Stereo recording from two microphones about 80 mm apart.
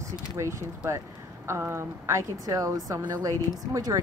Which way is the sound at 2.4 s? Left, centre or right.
Right.